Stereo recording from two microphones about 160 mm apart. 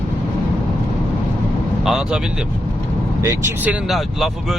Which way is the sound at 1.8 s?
5° right (ahead or behind).